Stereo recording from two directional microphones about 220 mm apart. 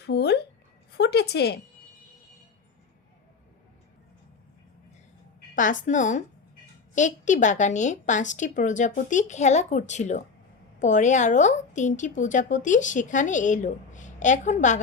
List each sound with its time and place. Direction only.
0.0 s a woman's voice: 50° left (ahead or behind)
5.5 s a woman's voice: 35° left (ahead or behind)